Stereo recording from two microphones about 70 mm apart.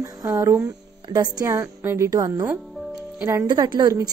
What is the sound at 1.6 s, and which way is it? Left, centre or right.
Speech, right.